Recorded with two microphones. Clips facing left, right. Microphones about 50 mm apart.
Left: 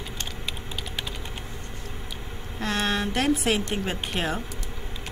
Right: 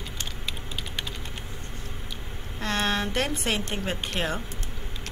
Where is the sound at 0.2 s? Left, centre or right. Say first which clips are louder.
Even; centre.